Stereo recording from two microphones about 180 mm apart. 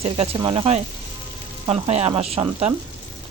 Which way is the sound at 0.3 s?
25° right (ahead or behind).